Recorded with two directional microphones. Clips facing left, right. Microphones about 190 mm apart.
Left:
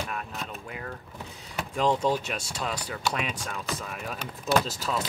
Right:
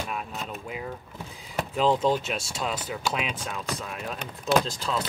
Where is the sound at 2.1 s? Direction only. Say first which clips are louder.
Right 2 dB; 5° right (ahead or behind).